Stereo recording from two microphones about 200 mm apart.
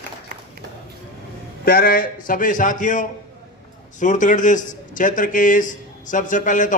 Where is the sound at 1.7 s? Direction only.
45° left (ahead or behind).